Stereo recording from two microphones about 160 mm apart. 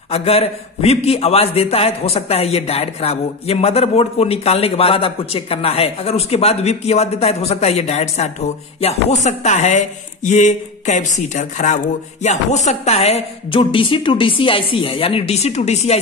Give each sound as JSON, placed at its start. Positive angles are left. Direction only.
{"t": 0.1, "sound": "a man's voice", "side_deg": 40}